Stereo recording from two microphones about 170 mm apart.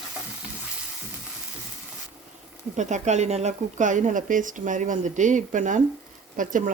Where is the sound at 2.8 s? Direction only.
45° right (ahead or behind).